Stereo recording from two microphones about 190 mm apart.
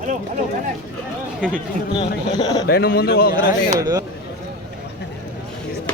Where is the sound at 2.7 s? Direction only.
55° left (ahead or behind).